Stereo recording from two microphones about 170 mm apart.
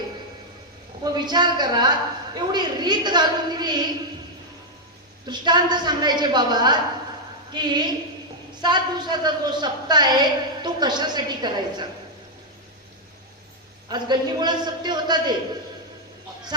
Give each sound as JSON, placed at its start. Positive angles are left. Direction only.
{"t": 1.0, "sound": "a woman's voice", "side_deg": -25}
{"t": 5.2, "sound": "a woman's voice", "side_deg": -25}
{"t": 13.8, "sound": "a woman's voice", "side_deg": -25}